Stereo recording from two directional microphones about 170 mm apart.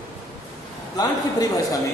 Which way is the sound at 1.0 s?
20° left (ahead or behind).